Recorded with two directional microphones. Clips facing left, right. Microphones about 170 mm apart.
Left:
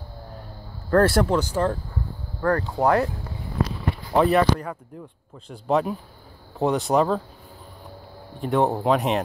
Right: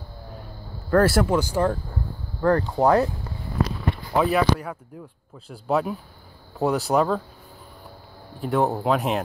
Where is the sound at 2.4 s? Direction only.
25° right (ahead or behind).